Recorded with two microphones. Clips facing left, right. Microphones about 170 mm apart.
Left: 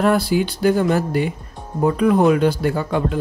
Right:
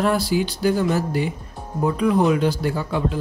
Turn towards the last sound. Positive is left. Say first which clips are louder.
# left 3 dB
turn(degrees=55)  # may be behind; listen again after turning